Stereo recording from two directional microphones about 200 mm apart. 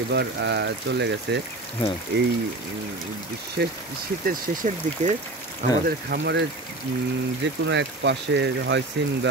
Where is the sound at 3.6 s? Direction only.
60° right (ahead or behind).